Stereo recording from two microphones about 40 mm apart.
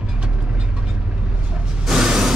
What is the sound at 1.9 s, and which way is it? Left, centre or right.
Music, centre.